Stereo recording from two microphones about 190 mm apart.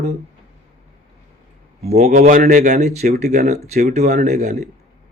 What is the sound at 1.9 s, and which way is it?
Speech, 50° right (ahead or behind).